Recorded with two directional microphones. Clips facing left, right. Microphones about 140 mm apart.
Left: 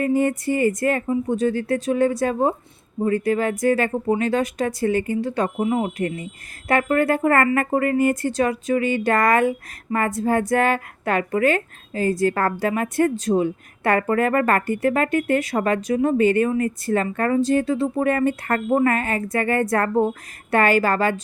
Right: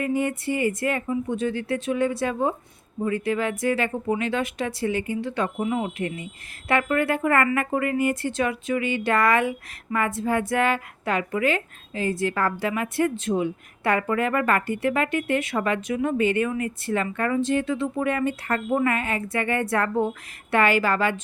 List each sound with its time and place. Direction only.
0.0 s a woman's voice: 40° left (ahead or behind)